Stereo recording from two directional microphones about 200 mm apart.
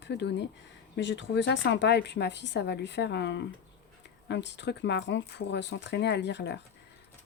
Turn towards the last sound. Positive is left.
turn(degrees=60)  # may be behind; listen again after turning